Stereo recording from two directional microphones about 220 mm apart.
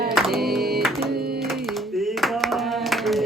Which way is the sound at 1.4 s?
Centre (ahead or behind).